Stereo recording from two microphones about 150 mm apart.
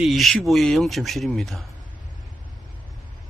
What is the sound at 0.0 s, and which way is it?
Speech, centre (ahead or behind).